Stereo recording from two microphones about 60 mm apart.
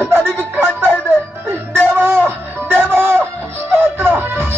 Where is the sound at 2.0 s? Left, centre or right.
Right.